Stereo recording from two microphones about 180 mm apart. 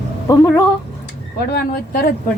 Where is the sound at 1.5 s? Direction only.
55° left (ahead or behind).